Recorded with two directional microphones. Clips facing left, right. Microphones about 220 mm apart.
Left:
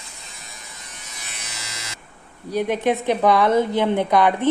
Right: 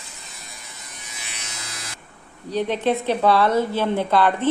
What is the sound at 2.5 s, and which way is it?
Speech, 10° left (ahead or behind).